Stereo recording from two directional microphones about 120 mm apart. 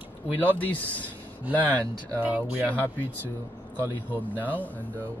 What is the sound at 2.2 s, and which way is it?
Speech, 15° right (ahead or behind).